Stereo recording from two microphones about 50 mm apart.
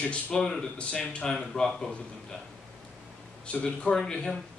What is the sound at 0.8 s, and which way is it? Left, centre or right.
A man's voice, left.